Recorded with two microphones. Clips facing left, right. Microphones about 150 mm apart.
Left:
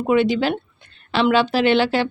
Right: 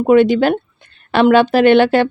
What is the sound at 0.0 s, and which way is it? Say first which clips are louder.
Speech: right 7 dB; 50° right (ahead or behind).